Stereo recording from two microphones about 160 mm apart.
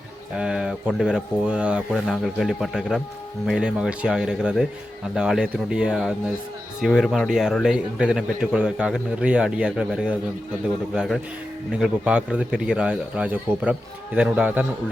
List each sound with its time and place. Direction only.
0.3 s a man's voice: 5° right (ahead or behind)